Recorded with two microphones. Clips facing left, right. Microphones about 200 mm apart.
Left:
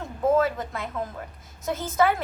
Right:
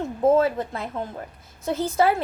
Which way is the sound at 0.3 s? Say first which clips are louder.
Right 2 dB; 30° right (ahead or behind).